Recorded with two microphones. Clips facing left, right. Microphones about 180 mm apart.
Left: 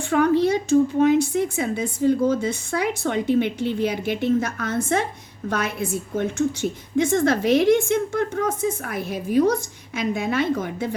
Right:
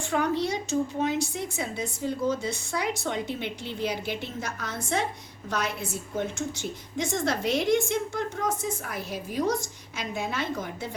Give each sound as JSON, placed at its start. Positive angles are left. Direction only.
{"t": 0.1, "sound": "a woman's voice", "side_deg": 55}